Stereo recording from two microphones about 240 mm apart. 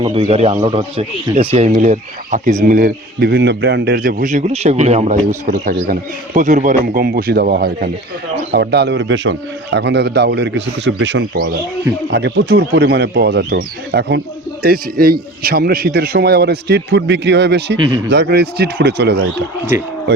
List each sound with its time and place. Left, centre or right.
0.0 s a man's voice: right
17.7 s a man's voice: right
18.1 s a man's voice: right